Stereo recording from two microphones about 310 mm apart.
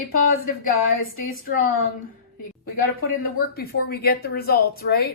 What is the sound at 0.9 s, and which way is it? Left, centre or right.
Speech, left.